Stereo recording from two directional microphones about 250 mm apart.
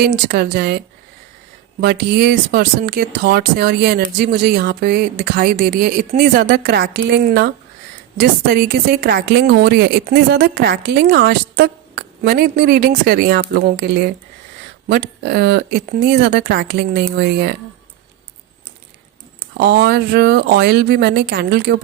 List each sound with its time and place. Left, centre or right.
0.0 s a woman's voice: right
1.8 s a woman's voice: right
19.5 s a woman's voice: right